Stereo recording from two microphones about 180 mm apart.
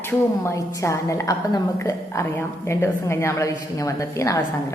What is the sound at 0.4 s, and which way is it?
A woman's voice, 15° left (ahead or behind).